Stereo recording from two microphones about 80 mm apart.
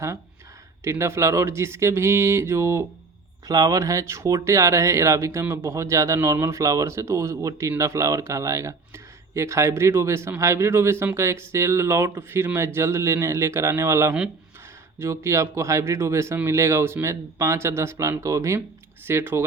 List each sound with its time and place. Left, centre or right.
0.9 s speech: right
3.4 s speech: right
19.0 s speech: right